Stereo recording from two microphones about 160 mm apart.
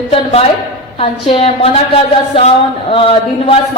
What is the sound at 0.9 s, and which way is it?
Speech, 35° left (ahead or behind).